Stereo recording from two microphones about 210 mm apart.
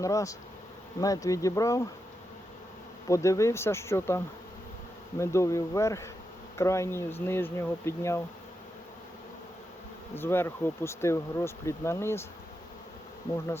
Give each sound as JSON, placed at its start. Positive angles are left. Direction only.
{"t": 0.0, "sound": "speech", "side_deg": 15}
{"t": 3.1, "sound": "speech", "side_deg": 15}
{"t": 5.2, "sound": "speech", "side_deg": 15}
{"t": 10.2, "sound": "speech", "side_deg": 10}